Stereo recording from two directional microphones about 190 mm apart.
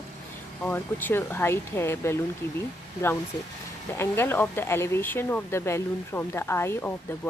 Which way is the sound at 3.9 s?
10° left (ahead or behind).